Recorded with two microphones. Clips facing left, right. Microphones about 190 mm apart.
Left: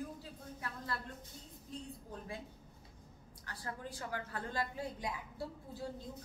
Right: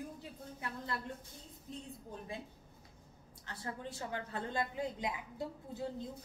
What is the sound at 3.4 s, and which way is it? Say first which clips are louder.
A woman's voice: right 2 dB; 25° right (ahead or behind).